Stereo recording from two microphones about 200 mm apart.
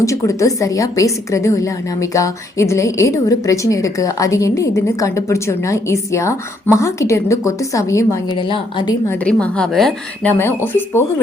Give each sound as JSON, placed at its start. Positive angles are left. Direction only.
{"t": 0.0, "sound": "a woman's voice", "side_deg": 15}
{"t": 9.2, "sound": "a woman's voice", "side_deg": 5}